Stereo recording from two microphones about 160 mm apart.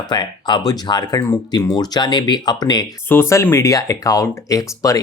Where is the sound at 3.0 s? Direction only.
15° left (ahead or behind).